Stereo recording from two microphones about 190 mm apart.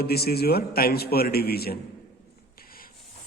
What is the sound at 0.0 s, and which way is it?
A man's voice, 55° left (ahead or behind).